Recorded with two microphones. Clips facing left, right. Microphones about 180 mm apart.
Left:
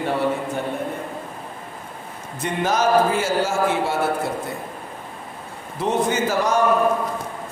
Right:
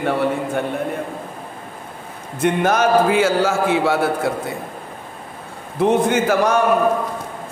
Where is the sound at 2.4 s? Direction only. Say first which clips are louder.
Right 5 dB; 60° right (ahead or behind).